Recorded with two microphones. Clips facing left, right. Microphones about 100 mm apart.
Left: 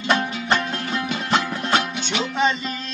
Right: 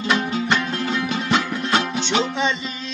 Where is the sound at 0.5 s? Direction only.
45° left (ahead or behind).